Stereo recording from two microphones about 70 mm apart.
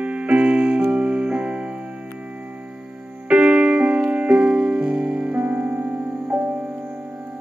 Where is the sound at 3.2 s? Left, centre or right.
Centre.